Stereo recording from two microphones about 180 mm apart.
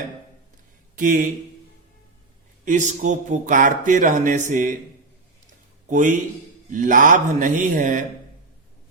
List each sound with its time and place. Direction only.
0.9 s speech: 45° right (ahead or behind)
2.6 s speech: 45° right (ahead or behind)
5.9 s speech: 45° right (ahead or behind)